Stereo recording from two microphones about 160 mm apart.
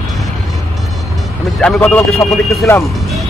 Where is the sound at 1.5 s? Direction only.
5° left (ahead or behind).